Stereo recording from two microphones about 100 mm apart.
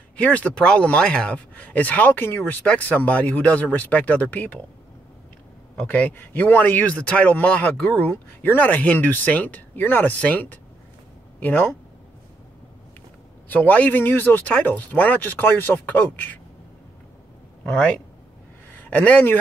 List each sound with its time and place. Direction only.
0.2 s speech: 10° left (ahead or behind)
5.9 s speech: 15° left (ahead or behind)
13.5 s speech: 15° left (ahead or behind)
18.8 s a man's voice: 15° left (ahead or behind)